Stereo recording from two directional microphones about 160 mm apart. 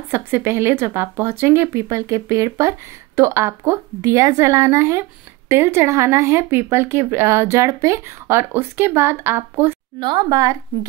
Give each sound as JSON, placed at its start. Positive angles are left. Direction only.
{"t": 0.1, "sound": "a woman's voice", "side_deg": -15}
{"t": 9.9, "sound": "a woman's voice", "side_deg": -30}